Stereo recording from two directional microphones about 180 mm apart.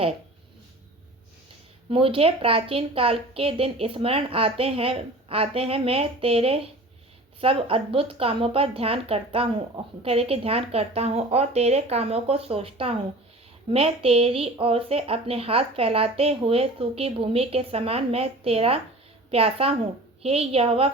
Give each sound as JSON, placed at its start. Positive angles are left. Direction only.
{"t": 1.9, "sound": "speech", "side_deg": -30}